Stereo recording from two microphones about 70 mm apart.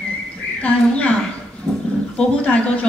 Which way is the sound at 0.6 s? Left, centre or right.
Centre.